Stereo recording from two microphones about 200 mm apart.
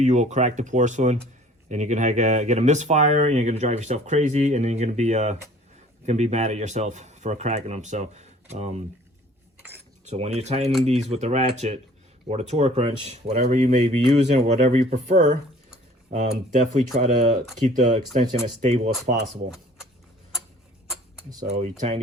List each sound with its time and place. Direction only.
0.0 s speech: 35° right (ahead or behind)
10.1 s speech: 30° right (ahead or behind)
21.4 s speech: 35° right (ahead or behind)